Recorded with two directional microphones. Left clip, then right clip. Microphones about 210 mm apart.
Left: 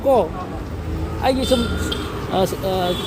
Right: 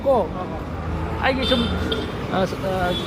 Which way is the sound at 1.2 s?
50° left (ahead or behind).